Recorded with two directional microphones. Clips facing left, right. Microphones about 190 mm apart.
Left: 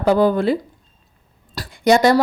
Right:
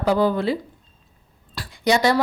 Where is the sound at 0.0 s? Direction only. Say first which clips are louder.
Left 4 dB; 50° left (ahead or behind).